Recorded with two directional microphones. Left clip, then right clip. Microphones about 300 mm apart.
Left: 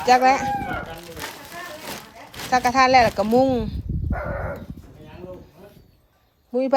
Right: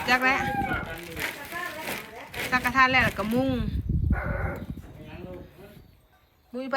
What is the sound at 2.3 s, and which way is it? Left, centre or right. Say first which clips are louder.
Speech: left 5 dB; centre.